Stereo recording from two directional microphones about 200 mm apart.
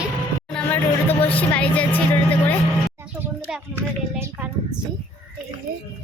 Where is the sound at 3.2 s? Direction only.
10° right (ahead or behind).